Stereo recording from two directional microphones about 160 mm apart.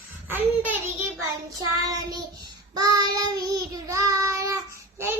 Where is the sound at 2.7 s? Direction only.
25° right (ahead or behind).